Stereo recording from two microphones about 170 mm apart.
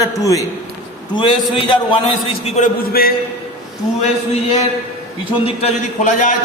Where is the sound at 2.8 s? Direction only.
60° left (ahead or behind).